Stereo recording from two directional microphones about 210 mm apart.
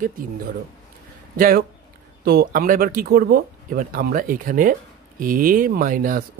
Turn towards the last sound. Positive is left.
turn(degrees=-40)  # may be behind; listen again after turning